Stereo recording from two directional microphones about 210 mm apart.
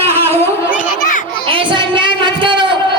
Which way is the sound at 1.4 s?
25° right (ahead or behind).